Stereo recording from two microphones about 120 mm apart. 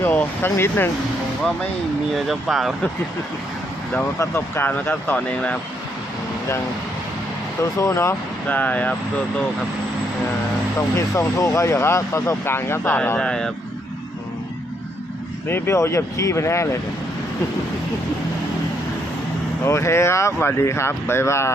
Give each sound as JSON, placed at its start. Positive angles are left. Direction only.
{"t": 0.0, "sound": "speech", "side_deg": 15}
{"t": 2.1, "sound": "speech", "side_deg": 0}
{"t": 3.9, "sound": "speech", "side_deg": 20}
{"t": 7.8, "sound": "speech", "side_deg": 25}
{"t": 8.4, "sound": "speech", "side_deg": 15}
{"t": 10.8, "sound": "speech", "side_deg": 25}
{"t": 15.4, "sound": "speech", "side_deg": 20}
{"t": 19.6, "sound": "speech", "side_deg": 20}